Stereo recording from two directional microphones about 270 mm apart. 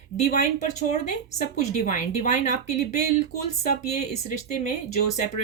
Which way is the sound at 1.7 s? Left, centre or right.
Left.